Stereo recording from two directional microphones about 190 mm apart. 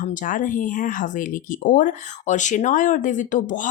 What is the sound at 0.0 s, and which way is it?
A woman's voice, 45° left (ahead or behind).